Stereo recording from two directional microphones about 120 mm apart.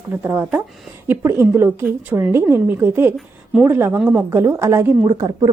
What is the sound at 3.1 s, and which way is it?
Speech, centre (ahead or behind).